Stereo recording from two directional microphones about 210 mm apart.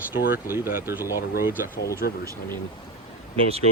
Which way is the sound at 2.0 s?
45° left (ahead or behind).